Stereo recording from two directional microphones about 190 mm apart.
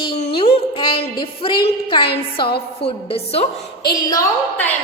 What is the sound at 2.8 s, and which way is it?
Speech, 30° left (ahead or behind).